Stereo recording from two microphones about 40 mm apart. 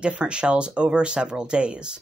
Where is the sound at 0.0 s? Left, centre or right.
Right.